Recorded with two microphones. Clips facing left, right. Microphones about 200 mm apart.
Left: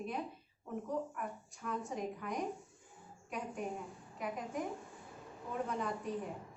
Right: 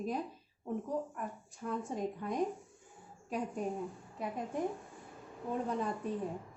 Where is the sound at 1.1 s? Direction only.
30° right (ahead or behind).